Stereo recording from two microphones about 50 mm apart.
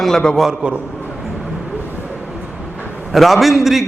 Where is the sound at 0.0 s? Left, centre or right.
Centre.